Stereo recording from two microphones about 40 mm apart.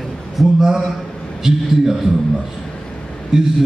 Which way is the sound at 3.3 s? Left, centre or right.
Centre.